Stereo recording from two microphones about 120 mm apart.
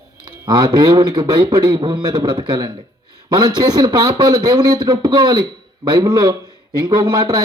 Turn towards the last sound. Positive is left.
turn(degrees=-35)  # may be behind; listen again after turning